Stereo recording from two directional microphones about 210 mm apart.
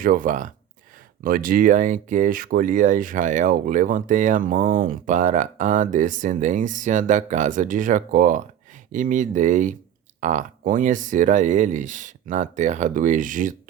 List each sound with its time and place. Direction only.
0.0 s speech: 40° right (ahead or behind)